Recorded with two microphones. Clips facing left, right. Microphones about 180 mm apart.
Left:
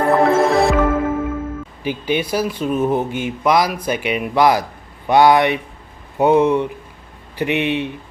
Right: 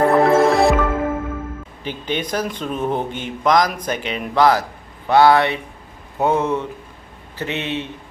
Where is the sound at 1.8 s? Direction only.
10° left (ahead or behind).